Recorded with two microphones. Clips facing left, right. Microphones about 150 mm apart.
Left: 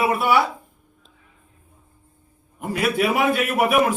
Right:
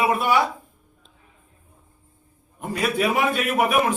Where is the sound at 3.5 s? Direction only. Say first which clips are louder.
Left 1 dB; centre (ahead or behind).